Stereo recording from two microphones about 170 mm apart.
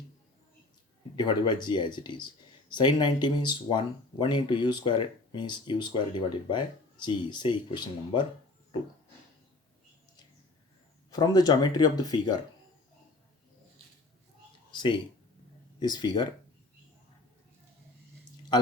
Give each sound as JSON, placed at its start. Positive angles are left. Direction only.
{"t": 1.1, "sound": "speech", "side_deg": 25}
{"t": 11.1, "sound": "speech", "side_deg": 20}
{"t": 14.7, "sound": "speech", "side_deg": 30}